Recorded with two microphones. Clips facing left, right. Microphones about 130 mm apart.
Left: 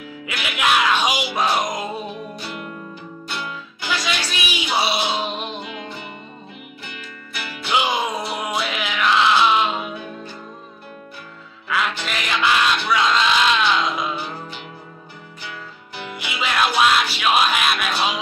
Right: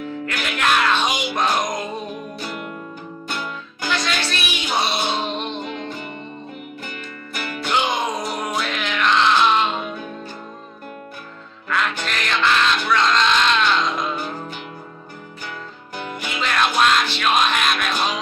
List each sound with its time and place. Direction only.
0.2 s speech: 10° left (ahead or behind)
3.9 s music: 10° left (ahead or behind)
5.6 s music: 45° right (ahead or behind)
7.7 s music: 10° left (ahead or behind)
11.7 s music: 5° left (ahead or behind)
16.0 s music: 45° right (ahead or behind)
16.3 s music: 5° left (ahead or behind)